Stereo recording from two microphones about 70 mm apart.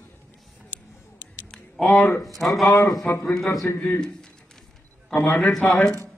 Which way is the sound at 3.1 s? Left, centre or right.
Left.